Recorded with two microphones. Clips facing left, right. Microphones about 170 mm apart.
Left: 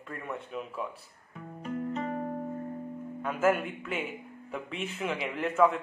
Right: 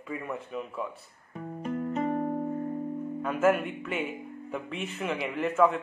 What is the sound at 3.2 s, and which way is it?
Speech, centre (ahead or behind).